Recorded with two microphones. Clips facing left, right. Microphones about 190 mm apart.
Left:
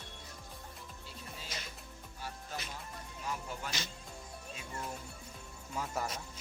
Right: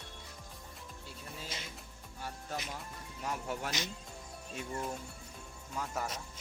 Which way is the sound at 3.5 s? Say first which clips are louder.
Right 5 dB; 75° right (ahead or behind).